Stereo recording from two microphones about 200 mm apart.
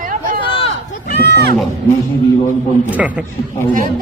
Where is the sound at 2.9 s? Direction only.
5° right (ahead or behind).